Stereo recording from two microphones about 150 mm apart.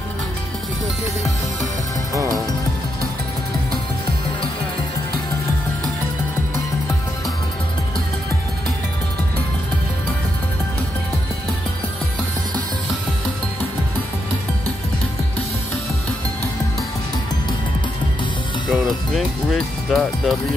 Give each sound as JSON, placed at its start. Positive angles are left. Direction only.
{"t": 2.1, "sound": "speech", "side_deg": -25}
{"t": 18.7, "sound": "speech", "side_deg": 5}